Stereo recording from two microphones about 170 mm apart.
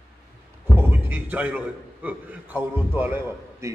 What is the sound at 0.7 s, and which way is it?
A man's voice, 10° right (ahead or behind).